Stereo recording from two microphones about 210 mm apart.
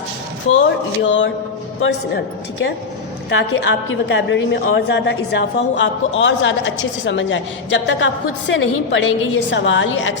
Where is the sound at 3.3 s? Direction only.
60° left (ahead or behind).